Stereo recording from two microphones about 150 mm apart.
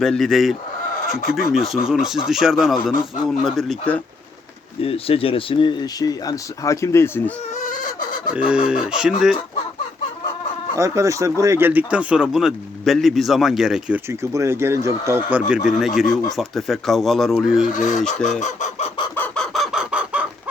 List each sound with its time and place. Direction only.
0.0 s speech: centre (ahead or behind)
1.0 s speech: 70° left (ahead or behind)
1.3 s speech: centre (ahead or behind)
4.8 s speech: 40° left (ahead or behind); by 7.3 s 15° left (ahead or behind)
7.5 s fowl: 60° left (ahead or behind)
8.4 s speech: 5° right (ahead or behind)
10.8 s speech: 20° right (ahead or behind); by 14.0 s 5° right (ahead or behind)
14.1 s speech: 20° right (ahead or behind); by 17.7 s centre (ahead or behind)
17.7 s filing: 55° left (ahead or behind)
18.3 s chicken: 50° left (ahead or behind)
19.1 s chicken: 10° left (ahead or behind)
19.5 s chicken: centre (ahead or behind)